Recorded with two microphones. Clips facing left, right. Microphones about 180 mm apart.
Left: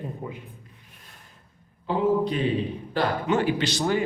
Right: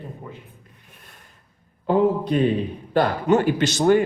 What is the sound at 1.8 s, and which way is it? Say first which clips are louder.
A man's voice: right 3 dB; 50° right (ahead or behind).